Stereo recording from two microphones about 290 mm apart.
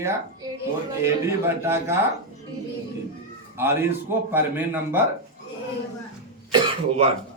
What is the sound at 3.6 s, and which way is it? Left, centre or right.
A man's voice, centre.